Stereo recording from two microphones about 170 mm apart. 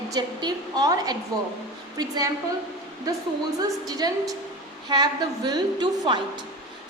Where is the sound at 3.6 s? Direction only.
20° right (ahead or behind).